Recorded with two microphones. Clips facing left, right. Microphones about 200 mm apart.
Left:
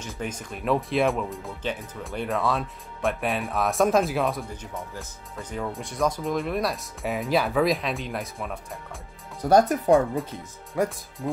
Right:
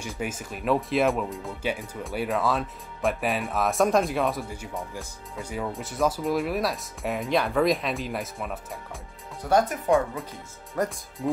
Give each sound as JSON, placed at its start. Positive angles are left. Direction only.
{"t": 0.0, "sound": "speech", "side_deg": -5}
{"t": 9.4, "sound": "speech", "side_deg": 40}
{"t": 10.7, "sound": "speech", "side_deg": 0}